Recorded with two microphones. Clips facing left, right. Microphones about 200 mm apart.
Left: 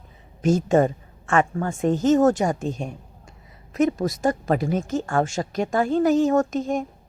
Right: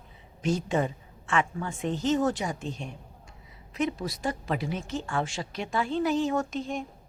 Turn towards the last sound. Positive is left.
turn(degrees=45)  # may be behind; listen again after turning